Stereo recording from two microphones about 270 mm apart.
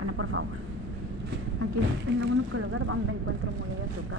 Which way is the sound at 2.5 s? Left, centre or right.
Right.